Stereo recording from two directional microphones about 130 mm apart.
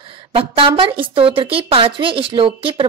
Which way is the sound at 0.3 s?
45° right (ahead or behind).